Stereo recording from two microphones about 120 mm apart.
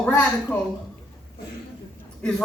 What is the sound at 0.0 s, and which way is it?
Speech, 15° left (ahead or behind).